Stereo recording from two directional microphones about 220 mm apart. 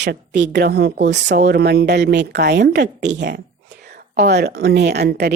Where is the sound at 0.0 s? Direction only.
50° right (ahead or behind).